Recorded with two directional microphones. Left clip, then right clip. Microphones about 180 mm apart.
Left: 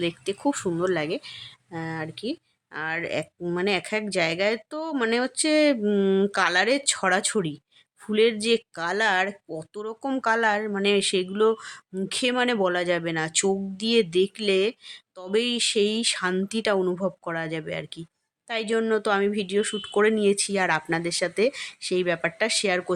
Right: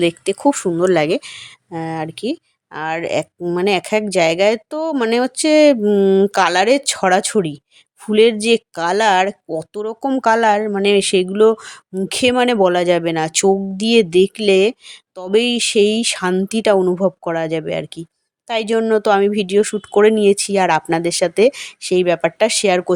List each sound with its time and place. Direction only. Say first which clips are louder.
0.0 s speech: right 11 dB; 40° right (ahead or behind)